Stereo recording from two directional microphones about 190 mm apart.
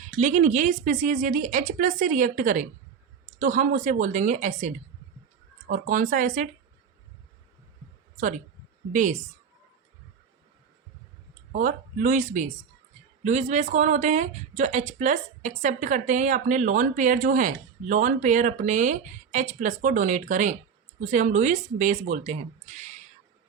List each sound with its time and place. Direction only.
0.0 s speech: 40° right (ahead or behind)
8.9 s speech: 45° right (ahead or behind)
11.5 s speech: 45° right (ahead or behind)